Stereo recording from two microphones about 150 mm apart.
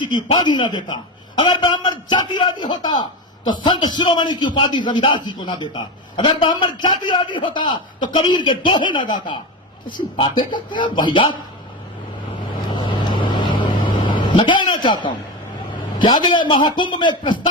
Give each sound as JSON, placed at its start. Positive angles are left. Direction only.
{"t": 0.0, "sound": "a man's voice", "side_deg": 30}
{"t": 12.7, "sound": "vehicle", "side_deg": 30}
{"t": 15.7, "sound": "a man's voice", "side_deg": 30}